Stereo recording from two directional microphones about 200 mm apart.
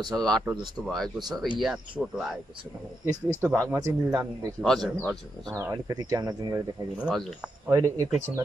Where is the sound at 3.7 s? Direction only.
10° right (ahead or behind).